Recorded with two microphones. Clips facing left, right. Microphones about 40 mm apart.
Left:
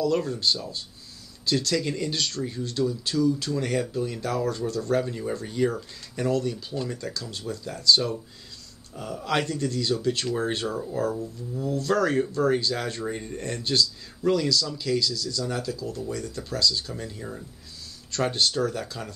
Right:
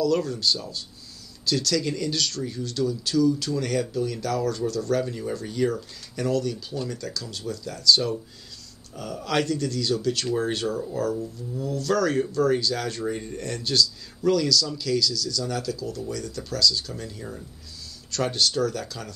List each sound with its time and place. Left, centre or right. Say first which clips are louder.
0.0 s speech: right 1 dB; left
5.0 s speech: even; centre
13.0 s speech: right 2 dB; centre
13.5 s speech: right 1 dB; centre
18.1 s speech: even; left